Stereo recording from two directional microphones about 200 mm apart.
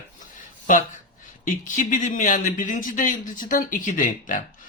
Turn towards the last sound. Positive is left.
turn(degrees=40)  # may be behind; listen again after turning